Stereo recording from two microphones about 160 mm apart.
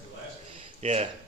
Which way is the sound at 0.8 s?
45° right (ahead or behind).